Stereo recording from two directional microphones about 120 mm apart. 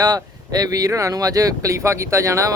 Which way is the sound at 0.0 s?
35° right (ahead or behind).